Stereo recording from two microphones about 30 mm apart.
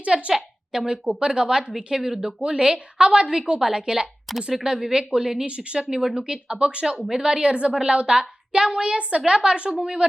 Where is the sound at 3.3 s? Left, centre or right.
Centre.